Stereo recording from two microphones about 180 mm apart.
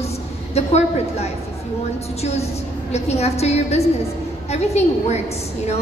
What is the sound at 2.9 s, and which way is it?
A woman's voice, 35° left (ahead or behind).